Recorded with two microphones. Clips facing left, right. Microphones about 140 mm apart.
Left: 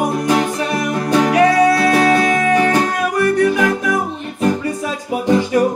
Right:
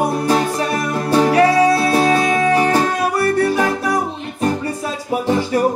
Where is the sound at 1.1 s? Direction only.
30° right (ahead or behind).